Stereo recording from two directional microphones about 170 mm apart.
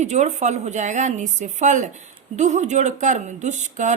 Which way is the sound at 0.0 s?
45° right (ahead or behind).